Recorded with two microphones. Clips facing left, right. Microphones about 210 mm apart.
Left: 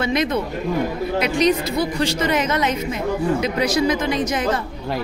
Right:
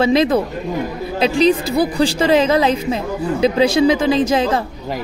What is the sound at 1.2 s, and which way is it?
A woman's voice, 30° right (ahead or behind).